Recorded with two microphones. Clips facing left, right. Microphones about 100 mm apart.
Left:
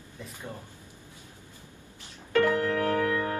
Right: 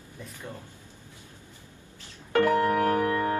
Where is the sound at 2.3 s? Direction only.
20° right (ahead or behind).